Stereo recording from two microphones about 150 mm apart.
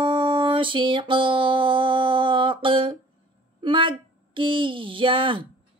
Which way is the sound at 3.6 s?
35° right (ahead or behind).